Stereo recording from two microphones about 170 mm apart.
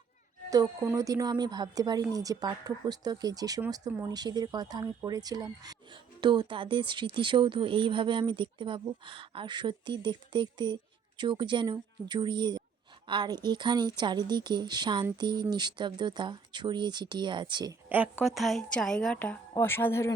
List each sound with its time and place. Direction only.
0.5 s speech: 20° right (ahead or behind)
17.8 s a woman's voice: 10° right (ahead or behind); by 20.1 s 15° left (ahead or behind)